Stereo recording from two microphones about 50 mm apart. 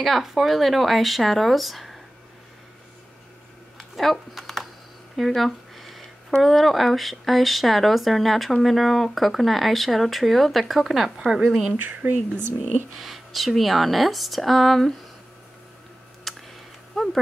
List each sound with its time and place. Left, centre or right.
0.0 s speech: centre
3.7 s a sound: centre
6.4 s speech: centre
12.0 s speech: right
13.0 s speech: centre
16.3 s tick: centre
16.9 s a sound: centre